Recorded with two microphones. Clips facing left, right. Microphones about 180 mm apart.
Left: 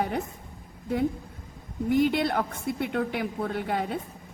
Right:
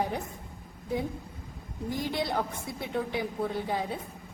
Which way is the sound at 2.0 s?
60° left (ahead or behind).